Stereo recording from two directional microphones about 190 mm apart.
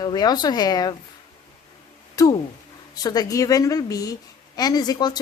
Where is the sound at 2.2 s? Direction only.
15° left (ahead or behind).